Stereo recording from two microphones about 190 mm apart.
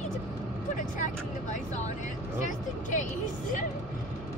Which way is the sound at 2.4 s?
40° left (ahead or behind).